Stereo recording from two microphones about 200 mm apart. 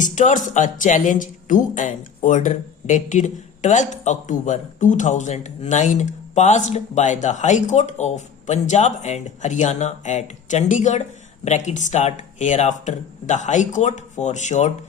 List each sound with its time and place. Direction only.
0.0 s speech: 40° left (ahead or behind)